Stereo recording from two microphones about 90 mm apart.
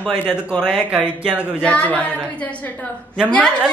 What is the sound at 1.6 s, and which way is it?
A woman's voice, 15° left (ahead or behind).